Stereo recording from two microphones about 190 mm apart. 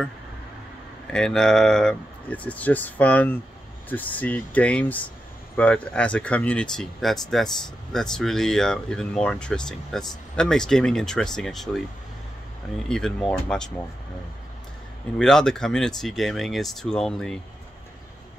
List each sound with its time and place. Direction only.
1.1 s speech: 5° left (ahead or behind)
12.8 s speech: 5° left (ahead or behind)
15.1 s speech: 5° left (ahead or behind)